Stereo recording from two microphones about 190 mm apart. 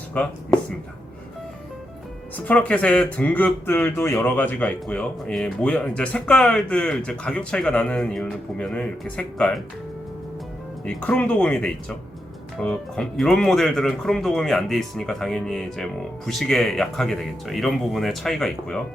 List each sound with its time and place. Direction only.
0.1 s speech: 5° left (ahead or behind)
2.3 s speech: 5° left (ahead or behind)
10.8 s speech: 5° left (ahead or behind)